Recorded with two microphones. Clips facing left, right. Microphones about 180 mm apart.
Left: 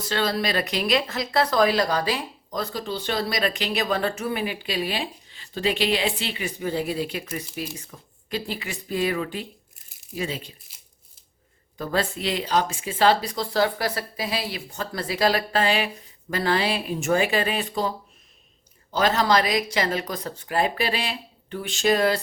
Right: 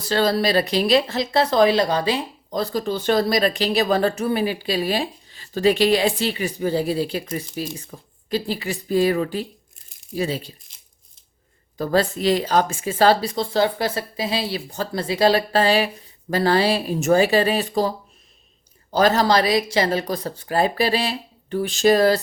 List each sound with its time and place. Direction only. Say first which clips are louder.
0.0 s speech: right 5 dB; 35° right (ahead or behind)
2.8 s speech: right 10 dB; 45° right (ahead or behind)
10.7 s a sound: left 1 dB; 5° left (ahead or behind)
11.8 s speech: right 6 dB; 40° right (ahead or behind)